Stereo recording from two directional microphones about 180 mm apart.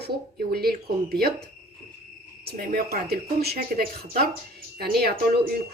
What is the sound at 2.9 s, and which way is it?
Speech, 60° right (ahead or behind).